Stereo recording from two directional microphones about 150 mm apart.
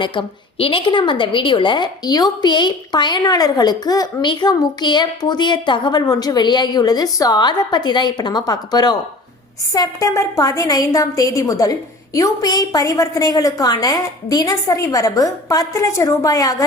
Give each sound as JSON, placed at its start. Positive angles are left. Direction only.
{"t": 0.0, "sound": "a woman's voice", "side_deg": 35}